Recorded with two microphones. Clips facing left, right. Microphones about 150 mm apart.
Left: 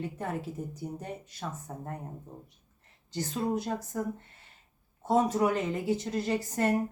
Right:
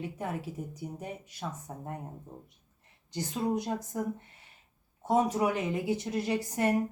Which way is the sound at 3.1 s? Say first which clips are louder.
Even; 15° right (ahead or behind).